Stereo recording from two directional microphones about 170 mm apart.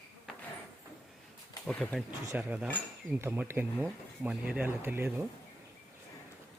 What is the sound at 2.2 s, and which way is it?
A man's voice, 10° right (ahead or behind).